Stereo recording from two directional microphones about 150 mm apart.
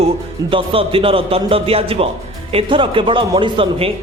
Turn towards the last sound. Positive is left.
turn(degrees=-40)  # may be behind; listen again after turning